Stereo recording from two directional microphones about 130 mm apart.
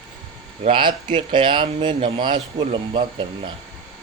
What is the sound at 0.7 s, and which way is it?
Speech, 40° right (ahead or behind).